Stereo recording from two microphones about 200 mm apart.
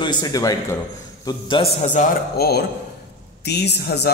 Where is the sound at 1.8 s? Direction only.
40° left (ahead or behind); by 4.1 s 55° left (ahead or behind).